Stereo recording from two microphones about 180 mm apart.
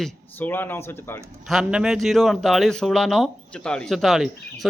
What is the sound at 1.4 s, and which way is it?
Speech, 5° right (ahead or behind).